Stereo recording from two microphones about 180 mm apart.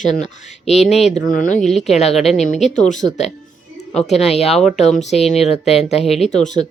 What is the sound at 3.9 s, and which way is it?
Speech, 35° left (ahead or behind).